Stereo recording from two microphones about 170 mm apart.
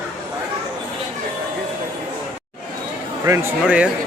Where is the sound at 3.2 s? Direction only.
15° right (ahead or behind).